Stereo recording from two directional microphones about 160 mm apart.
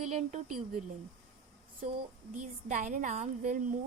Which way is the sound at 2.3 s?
50° right (ahead or behind).